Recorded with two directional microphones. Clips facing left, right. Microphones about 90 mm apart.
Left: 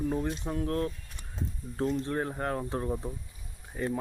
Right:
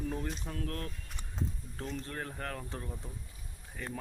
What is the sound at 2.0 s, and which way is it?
Speech, 25° left (ahead or behind).